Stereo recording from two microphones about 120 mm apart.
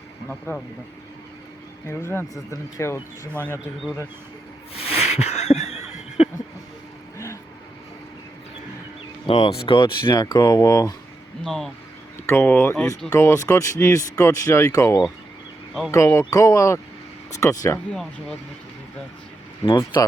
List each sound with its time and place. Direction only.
0.5 s speech: 20° left (ahead or behind)
1.9 s speech: 20° left (ahead or behind)
4.7 s laughter: 55° left (ahead or behind)
9.2 s speech: 50° left (ahead or behind); by 10.9 s 30° left (ahead or behind)
11.4 s speech: 5° left (ahead or behind)
12.2 s speech: 20° left (ahead or behind)
19.6 s speech: 40° left (ahead or behind)